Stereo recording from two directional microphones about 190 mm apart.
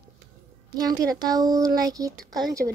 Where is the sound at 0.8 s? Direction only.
20° right (ahead or behind).